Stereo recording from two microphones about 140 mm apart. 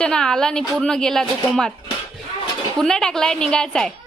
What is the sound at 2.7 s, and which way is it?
A woman's voice, 5° left (ahead or behind).